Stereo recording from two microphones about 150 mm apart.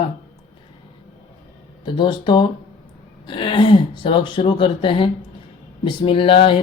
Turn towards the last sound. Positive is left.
turn(degrees=35)  # may be behind; listen again after turning